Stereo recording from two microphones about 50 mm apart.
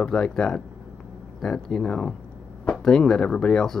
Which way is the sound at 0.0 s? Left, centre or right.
Centre.